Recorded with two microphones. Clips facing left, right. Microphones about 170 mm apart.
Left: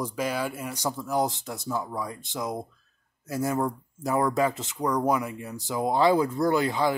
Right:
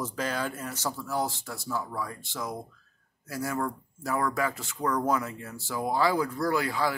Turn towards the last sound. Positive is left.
turn(degrees=20)  # may be behind; listen again after turning